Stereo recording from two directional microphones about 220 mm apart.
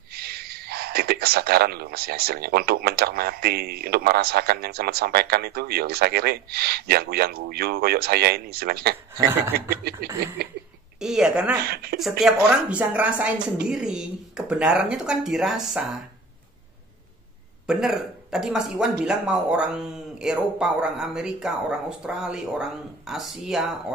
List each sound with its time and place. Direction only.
0.1 s a man's voice: 45° right (ahead or behind)
11.0 s speech: centre (ahead or behind)
11.6 s a man's voice: 45° right (ahead or behind)
12.0 s speech: centre (ahead or behind)
17.6 s speech: centre (ahead or behind)